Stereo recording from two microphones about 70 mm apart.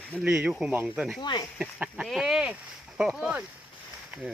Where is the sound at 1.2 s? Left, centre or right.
Left.